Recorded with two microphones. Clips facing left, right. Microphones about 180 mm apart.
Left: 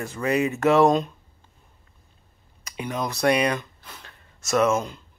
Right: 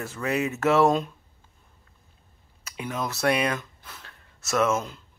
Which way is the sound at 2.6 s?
Centre (ahead or behind).